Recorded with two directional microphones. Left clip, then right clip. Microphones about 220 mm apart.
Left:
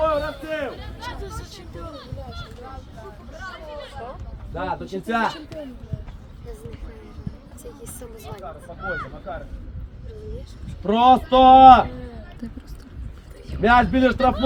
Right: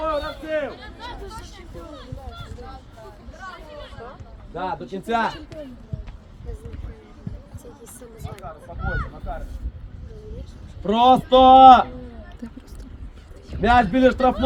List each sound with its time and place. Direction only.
0.0 s a sound: 5° left (ahead or behind)
4.5 s speech: 25° right (ahead or behind)
8.8 s speech: centre (ahead or behind)
10.8 s speech: 30° right (ahead or behind)
12.4 s speech: 5° left (ahead or behind)
13.6 s speech: 25° right (ahead or behind)